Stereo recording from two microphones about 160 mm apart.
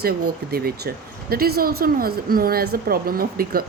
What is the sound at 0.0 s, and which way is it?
A woman's voice, 75° right (ahead or behind).